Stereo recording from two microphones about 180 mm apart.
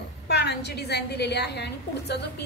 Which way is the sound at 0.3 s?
65° left (ahead or behind).